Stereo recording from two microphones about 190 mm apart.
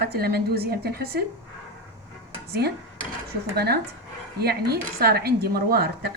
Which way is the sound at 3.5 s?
55° right (ahead or behind).